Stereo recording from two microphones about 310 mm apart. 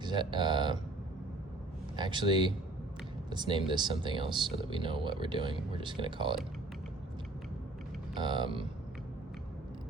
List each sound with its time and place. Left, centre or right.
0.0 s speech: centre
2.0 s speech: centre
8.1 s speech: centre